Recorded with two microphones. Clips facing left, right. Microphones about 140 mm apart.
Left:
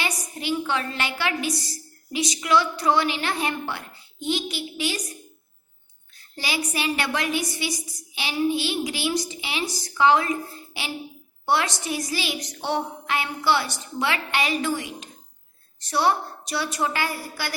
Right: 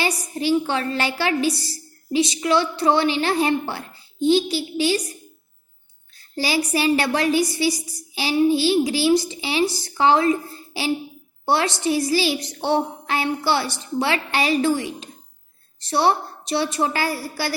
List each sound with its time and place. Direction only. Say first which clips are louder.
0.0 s a woman's voice: right 6 dB; 35° right (ahead or behind)
6.3 s a woman's voice: right 7 dB; 35° right (ahead or behind)